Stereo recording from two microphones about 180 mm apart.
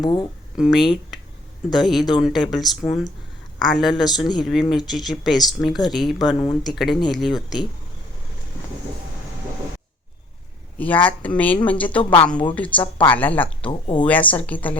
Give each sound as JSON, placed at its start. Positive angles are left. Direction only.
{"t": 0.0, "sound": "speech", "side_deg": 25}
{"t": 0.5, "sound": "speech", "side_deg": 0}
{"t": 10.8, "sound": "speech", "side_deg": 10}
{"t": 13.7, "sound": "speech", "side_deg": 25}
{"t": 14.0, "sound": "speech", "side_deg": 10}